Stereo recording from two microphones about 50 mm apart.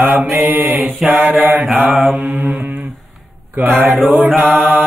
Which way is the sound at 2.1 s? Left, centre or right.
Right.